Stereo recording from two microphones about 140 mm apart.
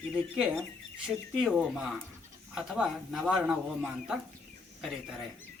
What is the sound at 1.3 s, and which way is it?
Speech, 5° right (ahead or behind).